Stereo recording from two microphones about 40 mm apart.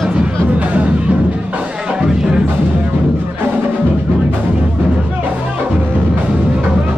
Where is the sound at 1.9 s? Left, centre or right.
Centre.